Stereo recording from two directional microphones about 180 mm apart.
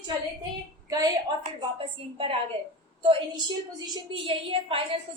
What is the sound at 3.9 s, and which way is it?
A woman's voice, 30° right (ahead or behind).